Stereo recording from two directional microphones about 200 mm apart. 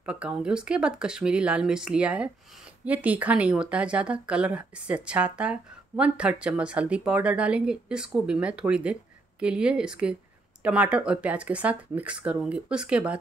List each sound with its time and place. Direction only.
0.0 s speech: 5° right (ahead or behind)